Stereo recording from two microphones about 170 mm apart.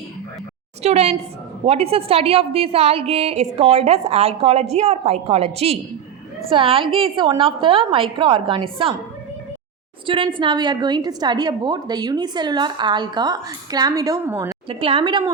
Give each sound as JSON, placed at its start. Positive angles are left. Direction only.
{"t": 0.8, "sound": "a woman's voice", "side_deg": -40}
{"t": 10.3, "sound": "a woman's voice", "side_deg": -30}
{"t": 14.7, "sound": "a woman's voice", "side_deg": -30}